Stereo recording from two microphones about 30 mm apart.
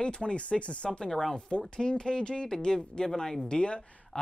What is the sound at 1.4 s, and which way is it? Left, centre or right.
A woman's voice, left.